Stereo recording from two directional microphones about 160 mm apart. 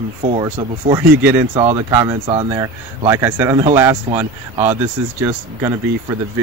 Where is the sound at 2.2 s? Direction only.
35° right (ahead or behind).